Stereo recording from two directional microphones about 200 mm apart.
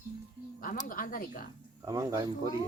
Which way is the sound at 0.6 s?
45° left (ahead or behind).